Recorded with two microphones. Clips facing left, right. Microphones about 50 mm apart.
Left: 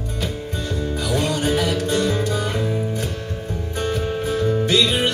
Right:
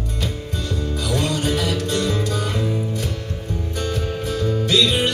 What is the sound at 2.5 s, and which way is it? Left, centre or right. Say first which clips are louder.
Music: even; centre.